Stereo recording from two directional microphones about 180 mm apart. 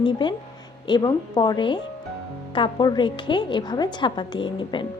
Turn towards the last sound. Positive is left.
turn(degrees=25)  # may be behind; listen again after turning